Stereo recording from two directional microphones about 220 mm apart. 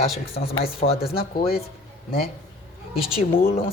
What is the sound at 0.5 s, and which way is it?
Speech, 25° left (ahead or behind).